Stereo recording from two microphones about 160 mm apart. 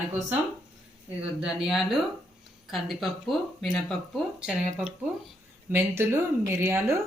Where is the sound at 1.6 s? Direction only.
Centre (ahead or behind).